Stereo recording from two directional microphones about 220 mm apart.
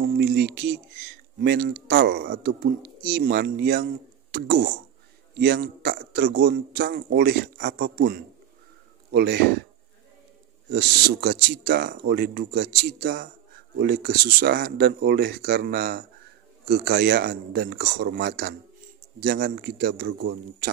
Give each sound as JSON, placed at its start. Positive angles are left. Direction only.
{"t": 0.0, "sound": "speech", "side_deg": -45}
{"t": 10.7, "sound": "speech", "side_deg": -45}